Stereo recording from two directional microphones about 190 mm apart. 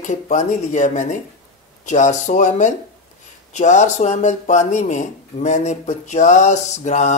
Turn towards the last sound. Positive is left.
turn(degrees=40)  # may be behind; listen again after turning